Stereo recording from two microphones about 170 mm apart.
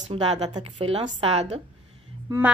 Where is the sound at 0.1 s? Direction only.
40° right (ahead or behind).